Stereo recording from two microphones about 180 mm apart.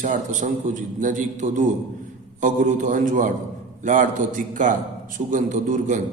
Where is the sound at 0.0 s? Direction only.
45° right (ahead or behind).